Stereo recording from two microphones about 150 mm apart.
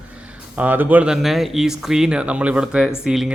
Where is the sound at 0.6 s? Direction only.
10° right (ahead or behind).